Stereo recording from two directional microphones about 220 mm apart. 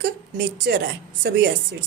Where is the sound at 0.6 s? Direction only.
45° right (ahead or behind).